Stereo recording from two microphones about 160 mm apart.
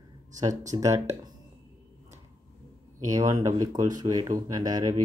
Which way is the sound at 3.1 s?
20° right (ahead or behind).